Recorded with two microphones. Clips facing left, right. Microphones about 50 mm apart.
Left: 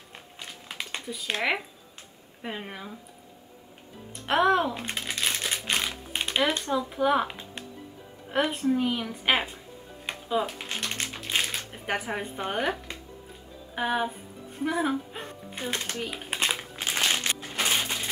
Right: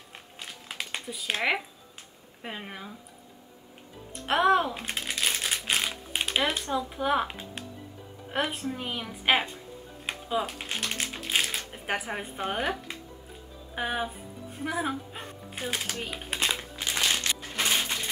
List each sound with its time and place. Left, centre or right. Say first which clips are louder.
0.1 s a sound: even; centre
2.4 s speech: left 2 dB; centre
4.3 s crumpling: even; centre
6.9 s speech: left 4 dB; centre
10.0 s music: left 2 dB; centre
10.6 s crumpling: even; centre
13.7 s speech: left 3 dB; centre
16.3 s crumpling: left 1 dB; centre
16.9 s a sound: left 1 dB; centre
17.5 s a sound: even; centre